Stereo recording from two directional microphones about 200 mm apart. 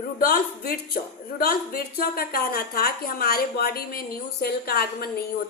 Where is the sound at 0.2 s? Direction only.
50° left (ahead or behind).